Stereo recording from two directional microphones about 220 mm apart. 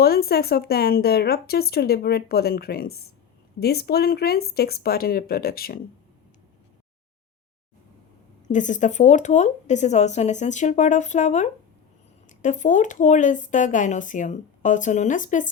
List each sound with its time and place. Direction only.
0.0 s a woman's voice: 45° left (ahead or behind)
8.4 s speech: 35° left (ahead or behind)